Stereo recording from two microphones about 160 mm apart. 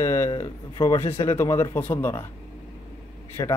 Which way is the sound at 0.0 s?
20° left (ahead or behind).